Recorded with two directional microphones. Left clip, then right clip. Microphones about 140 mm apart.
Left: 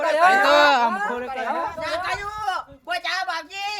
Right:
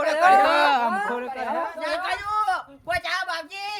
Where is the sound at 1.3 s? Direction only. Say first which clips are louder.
Left 2 dB; 40° left (ahead or behind).